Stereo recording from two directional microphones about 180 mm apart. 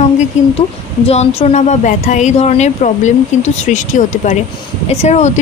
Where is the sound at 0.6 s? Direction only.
35° left (ahead or behind).